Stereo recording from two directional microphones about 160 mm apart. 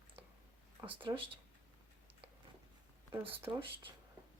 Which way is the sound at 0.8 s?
30° right (ahead or behind).